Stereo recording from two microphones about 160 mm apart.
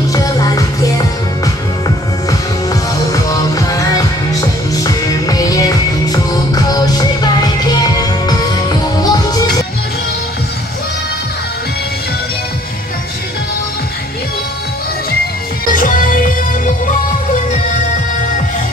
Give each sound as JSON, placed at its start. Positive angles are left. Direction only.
{"t": 0.1, "sound": "music", "side_deg": 20}
{"t": 15.7, "sound": "music", "side_deg": 55}